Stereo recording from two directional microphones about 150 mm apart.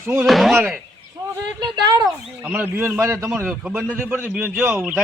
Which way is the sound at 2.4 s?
10° right (ahead or behind).